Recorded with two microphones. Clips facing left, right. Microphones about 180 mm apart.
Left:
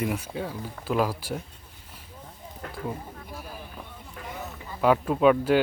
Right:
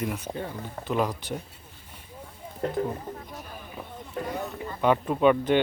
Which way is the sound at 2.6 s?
30° right (ahead or behind).